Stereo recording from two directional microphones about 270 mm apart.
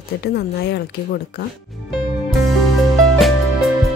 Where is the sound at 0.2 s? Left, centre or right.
Left.